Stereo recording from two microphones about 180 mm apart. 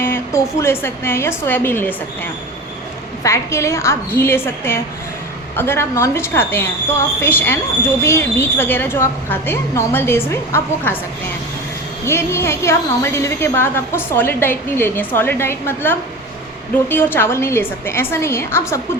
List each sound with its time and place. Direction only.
0.0 s a woman's voice: 15° left (ahead or behind)
3.2 s a woman's voice: 15° left (ahead or behind)
12.0 s a woman's voice: 15° left (ahead or behind)